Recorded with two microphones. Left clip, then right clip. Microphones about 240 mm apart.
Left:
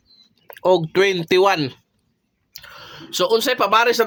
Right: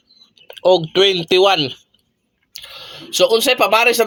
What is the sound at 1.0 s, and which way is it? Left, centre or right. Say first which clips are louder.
Speech: right 3 dB; left.